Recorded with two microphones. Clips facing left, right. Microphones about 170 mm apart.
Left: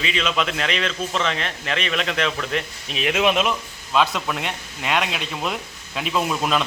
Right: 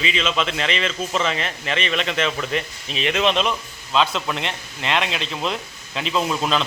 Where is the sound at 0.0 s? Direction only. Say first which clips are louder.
Even; centre (ahead or behind).